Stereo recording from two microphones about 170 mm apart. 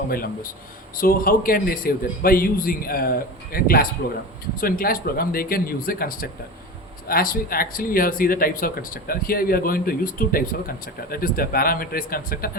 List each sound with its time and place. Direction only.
0.1 s speech: 60° left (ahead or behind)